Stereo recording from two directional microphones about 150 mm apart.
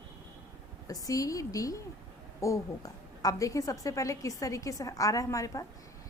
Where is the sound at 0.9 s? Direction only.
25° left (ahead or behind).